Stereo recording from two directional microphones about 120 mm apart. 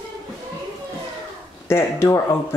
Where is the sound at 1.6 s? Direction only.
20° left (ahead or behind).